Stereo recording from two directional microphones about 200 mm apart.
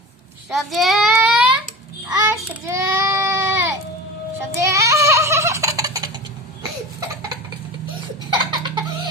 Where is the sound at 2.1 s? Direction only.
15° right (ahead or behind).